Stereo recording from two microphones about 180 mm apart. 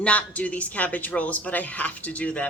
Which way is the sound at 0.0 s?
5° left (ahead or behind).